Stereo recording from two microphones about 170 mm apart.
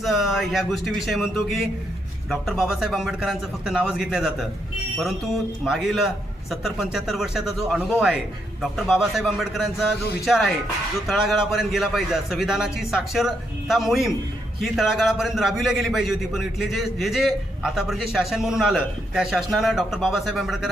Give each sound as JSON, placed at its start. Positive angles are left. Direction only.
{"t": 0.0, "sound": "a man's voice", "side_deg": 0}
{"t": 5.6, "sound": "a man's voice", "side_deg": 0}